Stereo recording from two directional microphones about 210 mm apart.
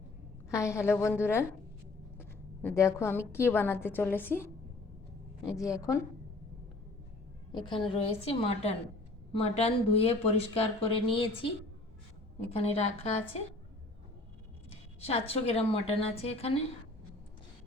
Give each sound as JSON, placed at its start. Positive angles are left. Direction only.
{"t": 0.5, "sound": "a woman's voice", "side_deg": 15}
{"t": 5.5, "sound": "a woman's voice", "side_deg": 15}
{"t": 7.5, "sound": "a woman's voice", "side_deg": 20}
{"t": 12.5, "sound": "speech", "side_deg": 30}
{"t": 14.7, "sound": "speech", "side_deg": 30}